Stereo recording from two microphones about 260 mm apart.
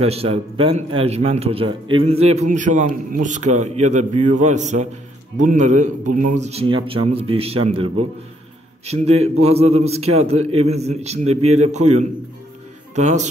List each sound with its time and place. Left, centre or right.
0.0 s a man's voice: right